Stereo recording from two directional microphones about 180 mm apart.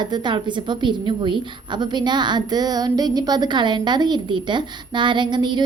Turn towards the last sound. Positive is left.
turn(degrees=-25)  # may be behind; listen again after turning